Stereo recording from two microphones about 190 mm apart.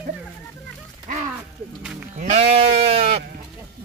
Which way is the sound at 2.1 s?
35° right (ahead or behind).